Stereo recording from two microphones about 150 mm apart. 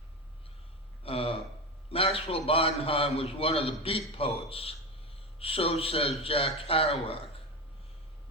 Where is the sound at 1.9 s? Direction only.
40° left (ahead or behind).